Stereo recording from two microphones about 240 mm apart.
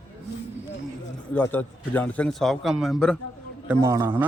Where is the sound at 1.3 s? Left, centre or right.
Centre.